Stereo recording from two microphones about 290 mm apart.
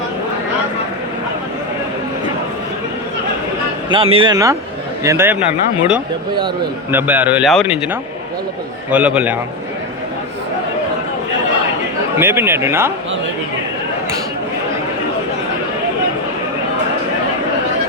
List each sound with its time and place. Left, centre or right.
3.8 s a man's voice: centre
6.9 s a man's voice: centre
8.9 s a man's voice: centre
12.1 s a man's voice: centre